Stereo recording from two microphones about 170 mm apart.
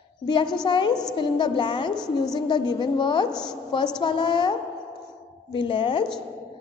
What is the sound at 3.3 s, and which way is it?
Speech, 5° left (ahead or behind).